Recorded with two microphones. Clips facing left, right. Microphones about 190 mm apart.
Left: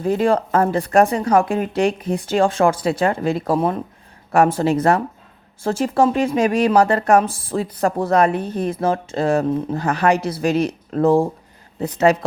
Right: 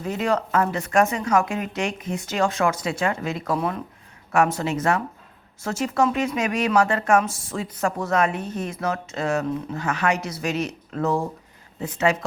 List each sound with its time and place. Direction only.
0.0 s speech: 30° left (ahead or behind)